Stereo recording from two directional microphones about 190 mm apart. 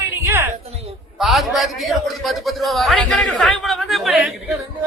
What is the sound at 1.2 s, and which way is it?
A man's voice, centre (ahead or behind).